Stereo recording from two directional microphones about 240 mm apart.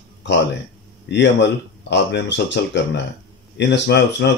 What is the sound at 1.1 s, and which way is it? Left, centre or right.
Speech, left.